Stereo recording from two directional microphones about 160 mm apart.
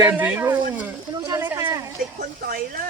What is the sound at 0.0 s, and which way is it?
Speech, 10° right (ahead or behind).